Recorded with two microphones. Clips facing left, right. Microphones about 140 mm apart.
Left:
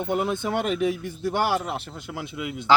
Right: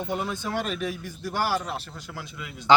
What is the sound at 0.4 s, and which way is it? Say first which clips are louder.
Speech: left 5 dB; 20° left (ahead or behind).